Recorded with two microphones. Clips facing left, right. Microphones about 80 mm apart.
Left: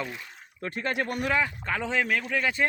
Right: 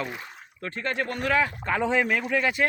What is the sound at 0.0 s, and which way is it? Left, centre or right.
Speech, right.